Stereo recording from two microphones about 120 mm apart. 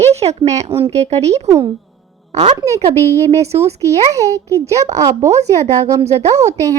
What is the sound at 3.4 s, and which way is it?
Speech, 60° right (ahead or behind).